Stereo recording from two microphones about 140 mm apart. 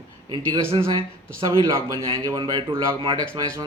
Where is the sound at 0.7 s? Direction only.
35° right (ahead or behind).